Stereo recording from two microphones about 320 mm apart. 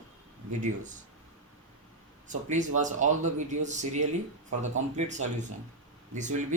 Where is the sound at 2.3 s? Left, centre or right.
Right.